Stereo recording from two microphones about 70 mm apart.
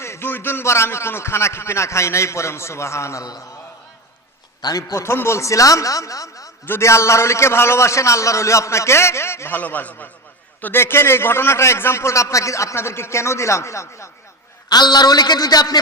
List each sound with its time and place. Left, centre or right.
0.0 s a man's voice: left
4.6 s a man's voice: left
4.9 s a man's voice: left
6.7 s a man's voice: left
9.6 s a man's voice: left
14.7 s a man's voice: left